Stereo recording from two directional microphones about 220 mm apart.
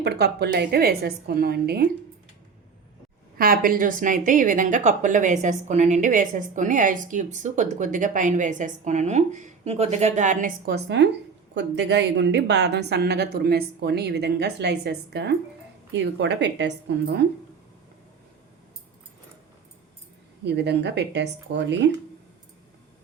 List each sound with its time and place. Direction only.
0.0 s a woman's voice: 50° right (ahead or behind)
3.3 s a woman's voice: 40° right (ahead or behind)
10.7 s a woman's voice: 50° right (ahead or behind)
20.4 s a woman's voice: 50° right (ahead or behind)